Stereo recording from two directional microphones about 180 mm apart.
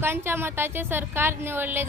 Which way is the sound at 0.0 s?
15° right (ahead or behind).